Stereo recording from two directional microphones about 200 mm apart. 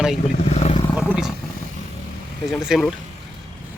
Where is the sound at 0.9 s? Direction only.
5° right (ahead or behind).